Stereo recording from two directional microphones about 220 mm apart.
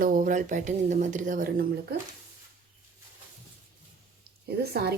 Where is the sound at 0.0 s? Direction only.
35° right (ahead or behind).